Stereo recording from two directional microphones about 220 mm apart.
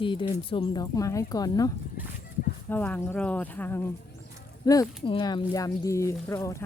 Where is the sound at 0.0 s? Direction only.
20° left (ahead or behind).